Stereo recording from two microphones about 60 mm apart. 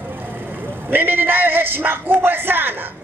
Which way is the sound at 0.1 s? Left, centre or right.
Right.